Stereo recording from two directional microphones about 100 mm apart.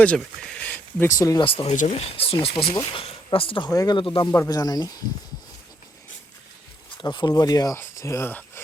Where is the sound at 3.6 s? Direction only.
35° left (ahead or behind).